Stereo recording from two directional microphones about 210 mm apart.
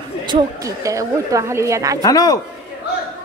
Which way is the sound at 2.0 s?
15° left (ahead or behind).